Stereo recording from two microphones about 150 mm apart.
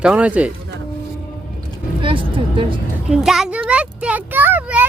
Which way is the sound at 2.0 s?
35° right (ahead or behind).